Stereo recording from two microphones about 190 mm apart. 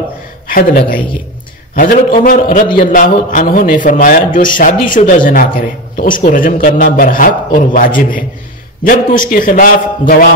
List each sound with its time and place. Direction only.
0.5 s a man's voice: 50° left (ahead or behind)